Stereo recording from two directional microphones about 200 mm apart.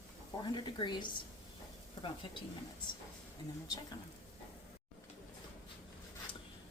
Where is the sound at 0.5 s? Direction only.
20° left (ahead or behind).